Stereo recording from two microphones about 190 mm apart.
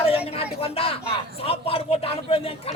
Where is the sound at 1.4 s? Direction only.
30° left (ahead or behind).